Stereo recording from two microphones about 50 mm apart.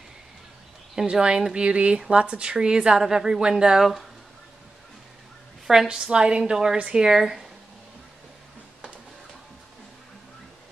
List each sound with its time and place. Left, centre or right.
1.0 s a woman's voice: centre
5.7 s a woman's voice: centre
7.1 s speech: centre